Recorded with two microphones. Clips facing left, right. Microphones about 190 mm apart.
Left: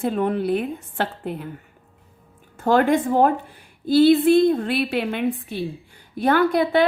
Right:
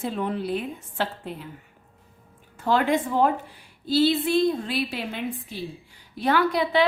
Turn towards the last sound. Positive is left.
turn(degrees=50)  # may be behind; listen again after turning